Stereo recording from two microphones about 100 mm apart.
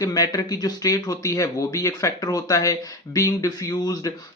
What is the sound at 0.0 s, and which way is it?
Speech, 35° left (ahead or behind).